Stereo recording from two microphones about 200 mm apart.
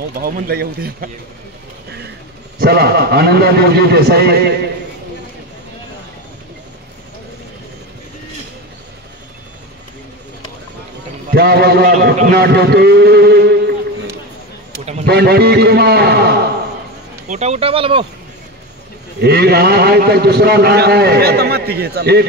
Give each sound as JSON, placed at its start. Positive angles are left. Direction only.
{"t": 0.2, "sound": "a man's voice", "side_deg": -45}
{"t": 2.6, "sound": "a man's voice", "side_deg": -50}
{"t": 11.3, "sound": "a man's voice", "side_deg": -50}
{"t": 15.0, "sound": "a man's voice", "side_deg": -55}
{"t": 17.3, "sound": "speech", "side_deg": -35}
{"t": 19.2, "sound": "a man's voice", "side_deg": -50}